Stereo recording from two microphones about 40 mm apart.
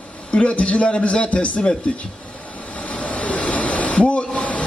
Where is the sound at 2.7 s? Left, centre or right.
Left.